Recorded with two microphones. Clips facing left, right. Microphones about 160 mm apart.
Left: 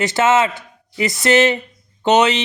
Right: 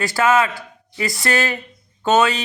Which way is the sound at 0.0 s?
20° left (ahead or behind).